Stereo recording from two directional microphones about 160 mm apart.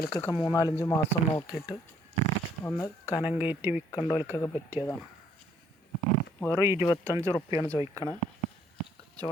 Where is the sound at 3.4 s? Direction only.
10° right (ahead or behind).